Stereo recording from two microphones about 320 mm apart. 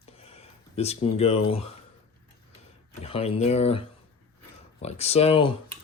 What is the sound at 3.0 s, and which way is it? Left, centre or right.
Speech, centre.